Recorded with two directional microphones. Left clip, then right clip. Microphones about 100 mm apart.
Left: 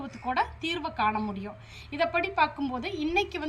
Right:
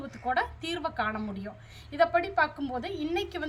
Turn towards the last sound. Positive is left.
turn(degrees=-50)  # may be behind; listen again after turning